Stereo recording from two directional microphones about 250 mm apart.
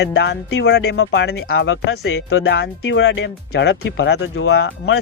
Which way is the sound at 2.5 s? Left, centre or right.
Left.